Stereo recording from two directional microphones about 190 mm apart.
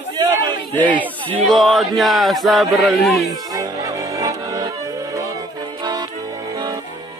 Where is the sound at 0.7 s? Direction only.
10° left (ahead or behind).